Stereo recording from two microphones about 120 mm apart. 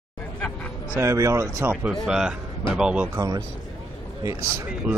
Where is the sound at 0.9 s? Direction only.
25° right (ahead or behind).